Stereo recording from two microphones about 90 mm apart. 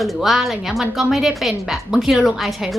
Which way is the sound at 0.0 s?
Centre (ahead or behind).